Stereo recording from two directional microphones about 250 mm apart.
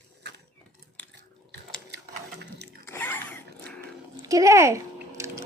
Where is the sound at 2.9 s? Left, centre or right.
Centre.